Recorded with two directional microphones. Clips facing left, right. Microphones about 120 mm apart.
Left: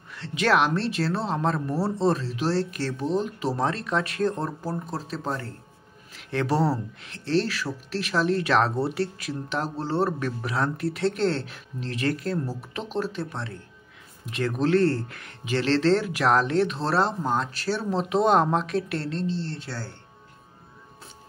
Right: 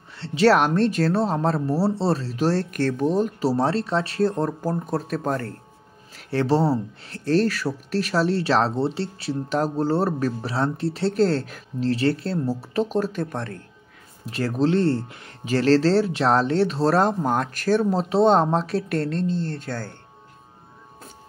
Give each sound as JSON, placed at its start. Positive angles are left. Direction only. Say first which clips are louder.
{"t": 0.1, "sound": "speech", "louder": "right 5 dB", "side_deg": -30}
{"t": 3.2, "sound": "speech", "louder": "right 5 dB", "side_deg": -40}
{"t": 6.1, "sound": "speech", "louder": "right 4 dB", "side_deg": -30}
{"t": 7.1, "sound": "speech", "louder": "right 4 dB", "side_deg": -40}
{"t": 14.2, "sound": "speech", "louder": "right 3 dB", "side_deg": -35}
{"t": 15.4, "sound": "speech", "louder": "right 4 dB", "side_deg": -40}